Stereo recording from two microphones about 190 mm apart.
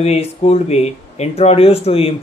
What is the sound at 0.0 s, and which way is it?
Speech, 35° left (ahead or behind).